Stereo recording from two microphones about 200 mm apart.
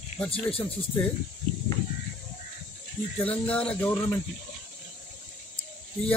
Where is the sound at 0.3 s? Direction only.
30° left (ahead or behind).